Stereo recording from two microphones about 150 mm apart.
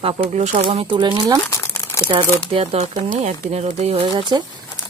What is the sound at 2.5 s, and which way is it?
Speech, 40° right (ahead or behind).